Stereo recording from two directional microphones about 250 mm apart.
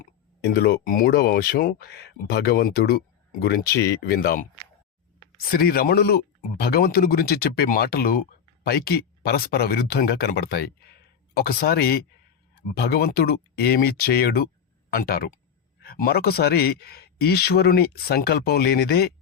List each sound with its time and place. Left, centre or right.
0.0 s speech: left
5.5 s speech: left